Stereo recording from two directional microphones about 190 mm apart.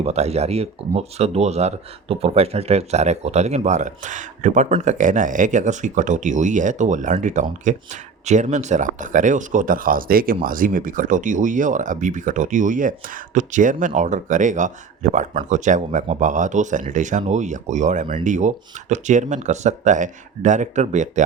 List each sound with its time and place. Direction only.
0.0 s speech: 35° right (ahead or behind)